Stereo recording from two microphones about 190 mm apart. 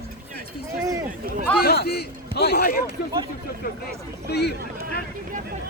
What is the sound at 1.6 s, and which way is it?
Speech, 55° left (ahead or behind).